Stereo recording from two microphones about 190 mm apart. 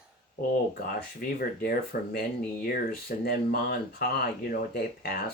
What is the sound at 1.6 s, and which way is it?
Speech, 55° left (ahead or behind).